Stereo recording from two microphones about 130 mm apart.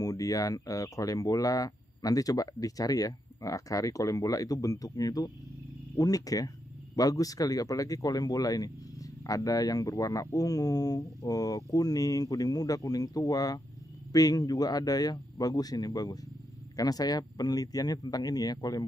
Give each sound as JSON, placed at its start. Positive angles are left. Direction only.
{"t": 0.0, "sound": "speech", "side_deg": 25}